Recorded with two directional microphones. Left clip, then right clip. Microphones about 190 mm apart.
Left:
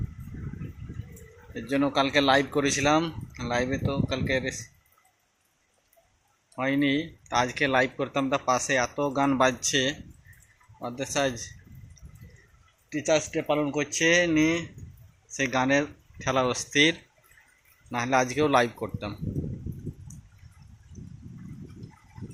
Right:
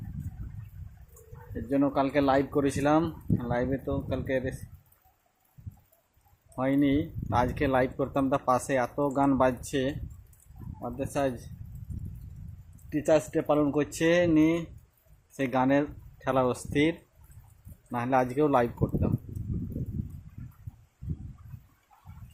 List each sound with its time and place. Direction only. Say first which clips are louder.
1.6 s speech: left 2 dB; 10° right (ahead or behind)
6.6 s speech: left 1 dB; 20° right (ahead or behind)
10.9 s speech: left 2 dB; 15° right (ahead or behind)
13.1 s speech: even; 25° right (ahead or behind); by 19.1 s 5° right (ahead or behind)